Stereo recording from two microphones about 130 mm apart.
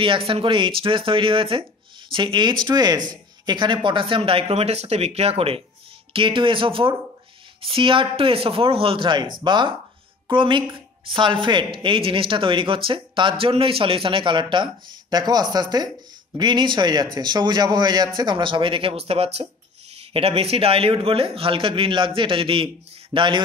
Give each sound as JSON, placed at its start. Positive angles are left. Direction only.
{"t": 0.0, "sound": "a woman's voice", "side_deg": -40}